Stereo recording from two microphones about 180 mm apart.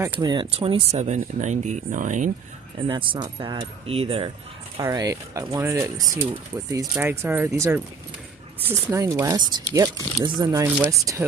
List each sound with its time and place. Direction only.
0.0 s speech: 20° right (ahead or behind); by 2.3 s 45° right (ahead or behind)
2.9 s speech: 30° right (ahead or behind)
4.8 s speech: 20° right (ahead or behind)